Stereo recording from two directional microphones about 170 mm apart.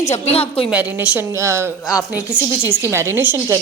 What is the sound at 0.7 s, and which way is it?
A woman's voice, 10° right (ahead or behind).